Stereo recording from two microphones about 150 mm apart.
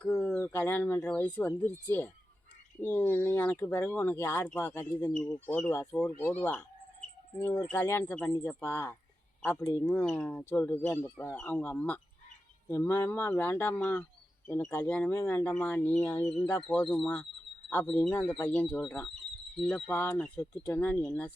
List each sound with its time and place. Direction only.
0.0 s speech: 15° left (ahead or behind)